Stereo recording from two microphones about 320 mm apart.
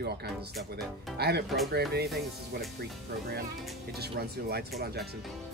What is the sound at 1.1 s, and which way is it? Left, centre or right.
Speech, right.